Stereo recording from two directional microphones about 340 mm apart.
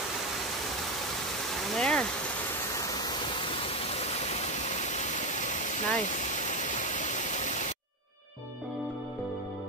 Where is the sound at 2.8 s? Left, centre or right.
Centre.